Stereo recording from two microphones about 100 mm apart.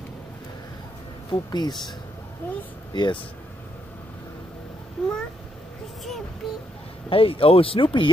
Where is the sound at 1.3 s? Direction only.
45° left (ahead or behind).